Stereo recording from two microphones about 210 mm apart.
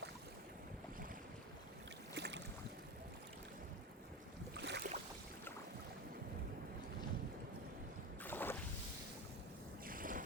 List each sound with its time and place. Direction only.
2.1 s boat: 55° right (ahead or behind)
4.5 s boat: 55° right (ahead or behind)
8.2 s boat: 10° left (ahead or behind)
9.8 s boat: 40° right (ahead or behind)